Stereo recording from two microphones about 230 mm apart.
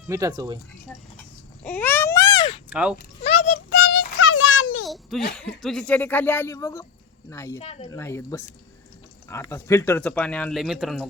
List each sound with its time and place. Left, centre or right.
0.1 s speech: centre
1.6 s baby cry: centre
2.6 s speech: centre
3.2 s a sound: left
4.9 s a sound: centre
5.6 s speech: centre
7.6 s speech: left
7.9 s speech: centre